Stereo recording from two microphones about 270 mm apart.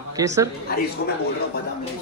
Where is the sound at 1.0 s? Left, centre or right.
Left.